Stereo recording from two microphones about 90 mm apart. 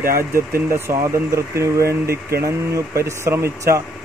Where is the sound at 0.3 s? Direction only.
30° right (ahead or behind).